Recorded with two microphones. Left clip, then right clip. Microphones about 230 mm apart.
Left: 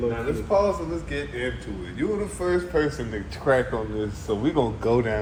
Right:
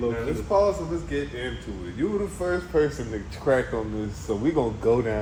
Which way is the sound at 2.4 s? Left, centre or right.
Left.